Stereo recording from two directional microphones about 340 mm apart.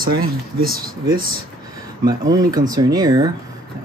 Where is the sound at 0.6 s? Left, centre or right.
Right.